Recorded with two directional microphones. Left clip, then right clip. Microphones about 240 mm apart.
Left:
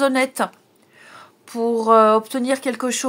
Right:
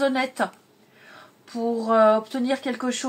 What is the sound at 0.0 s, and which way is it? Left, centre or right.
Speech, left.